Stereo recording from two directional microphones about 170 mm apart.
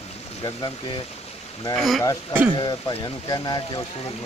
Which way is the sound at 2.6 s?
25° left (ahead or behind).